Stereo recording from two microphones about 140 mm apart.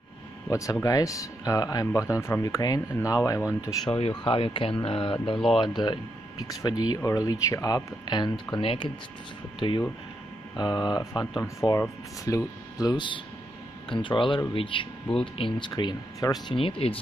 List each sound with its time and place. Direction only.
0.5 s speech: 25° left (ahead or behind)
4.0 s speech: 40° left (ahead or behind)
16.5 s speech: 40° left (ahead or behind)